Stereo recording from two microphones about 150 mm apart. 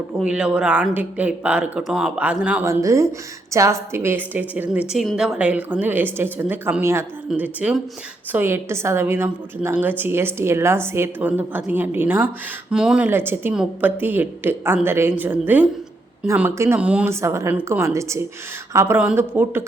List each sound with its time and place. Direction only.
0.2 s a woman's voice: 5° right (ahead or behind)
2.8 s a woman's voice: 20° right (ahead or behind)
17.2 s a woman's voice: 20° right (ahead or behind)